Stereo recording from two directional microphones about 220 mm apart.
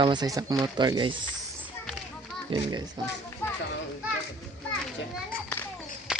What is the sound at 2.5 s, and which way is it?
Speech, 25° right (ahead or behind).